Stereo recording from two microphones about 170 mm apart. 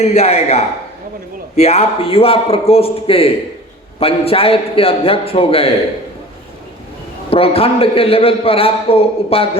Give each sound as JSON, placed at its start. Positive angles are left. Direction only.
{"t": 0.0, "sound": "a man's voice", "side_deg": 40}
{"t": 7.3, "sound": "a man's voice", "side_deg": 35}